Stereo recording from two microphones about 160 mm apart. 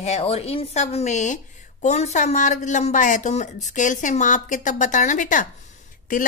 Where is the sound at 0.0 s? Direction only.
40° left (ahead or behind).